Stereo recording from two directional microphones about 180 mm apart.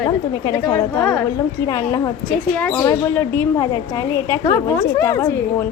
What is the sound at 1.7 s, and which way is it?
A woman's voice, 20° left (ahead or behind).